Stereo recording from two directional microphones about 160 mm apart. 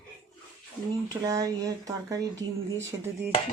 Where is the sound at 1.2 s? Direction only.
20° right (ahead or behind).